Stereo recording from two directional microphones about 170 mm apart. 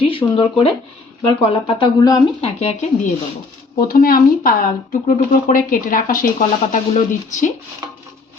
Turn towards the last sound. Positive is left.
turn(degrees=50)  # may be behind; listen again after turning